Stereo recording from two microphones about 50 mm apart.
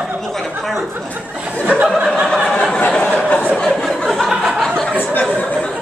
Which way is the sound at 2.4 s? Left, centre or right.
Centre.